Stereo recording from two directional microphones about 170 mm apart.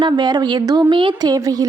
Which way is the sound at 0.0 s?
25° right (ahead or behind).